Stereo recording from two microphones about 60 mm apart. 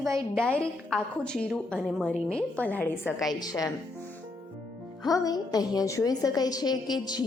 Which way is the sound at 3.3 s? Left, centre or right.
Left.